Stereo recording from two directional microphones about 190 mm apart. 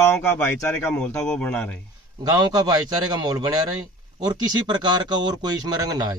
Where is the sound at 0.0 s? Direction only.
10° left (ahead or behind).